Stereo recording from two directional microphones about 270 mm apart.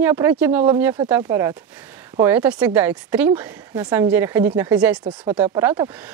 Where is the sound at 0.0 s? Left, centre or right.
Centre.